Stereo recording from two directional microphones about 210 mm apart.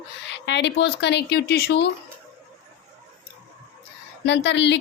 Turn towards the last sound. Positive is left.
turn(degrees=55)  # may be behind; listen again after turning